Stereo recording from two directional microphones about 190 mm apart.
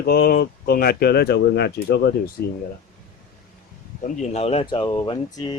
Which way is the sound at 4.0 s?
40° left (ahead or behind).